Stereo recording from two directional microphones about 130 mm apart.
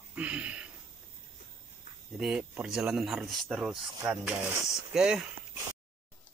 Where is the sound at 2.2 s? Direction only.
5° right (ahead or behind).